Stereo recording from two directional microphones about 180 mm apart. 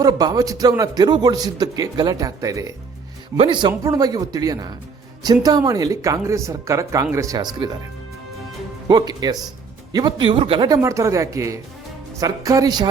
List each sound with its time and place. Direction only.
0.0 s a man's voice: 20° right (ahead or behind)
8.9 s a man's voice: 20° right (ahead or behind)
10.8 s a man's voice: 15° right (ahead or behind)